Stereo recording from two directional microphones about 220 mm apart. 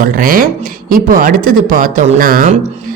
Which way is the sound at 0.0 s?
40° right (ahead or behind).